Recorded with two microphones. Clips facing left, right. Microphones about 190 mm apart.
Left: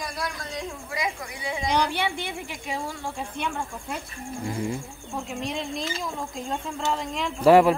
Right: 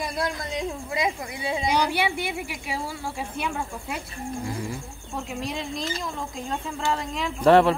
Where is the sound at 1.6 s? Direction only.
10° right (ahead or behind).